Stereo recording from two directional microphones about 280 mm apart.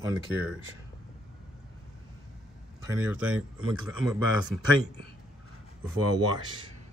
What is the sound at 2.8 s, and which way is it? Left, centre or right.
Speech, centre.